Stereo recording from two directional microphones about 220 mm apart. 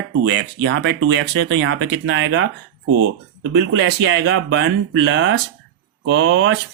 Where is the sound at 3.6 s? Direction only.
55° right (ahead or behind).